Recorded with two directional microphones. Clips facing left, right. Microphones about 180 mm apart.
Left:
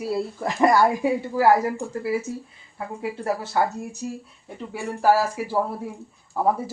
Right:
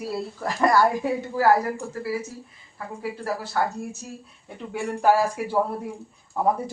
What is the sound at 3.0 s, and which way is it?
Speech, 20° left (ahead or behind).